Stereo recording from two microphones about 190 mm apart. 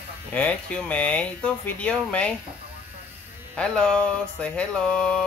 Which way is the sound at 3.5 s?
5° left (ahead or behind).